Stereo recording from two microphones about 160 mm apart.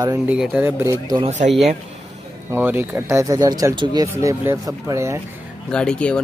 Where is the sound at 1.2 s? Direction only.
45° right (ahead or behind).